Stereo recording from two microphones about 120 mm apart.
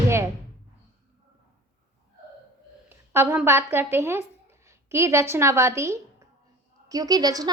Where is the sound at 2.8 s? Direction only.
20° right (ahead or behind).